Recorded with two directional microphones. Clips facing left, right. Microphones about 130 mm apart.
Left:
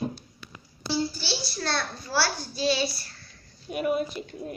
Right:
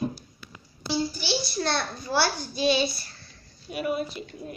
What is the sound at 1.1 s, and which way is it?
A child's voice, 20° right (ahead or behind).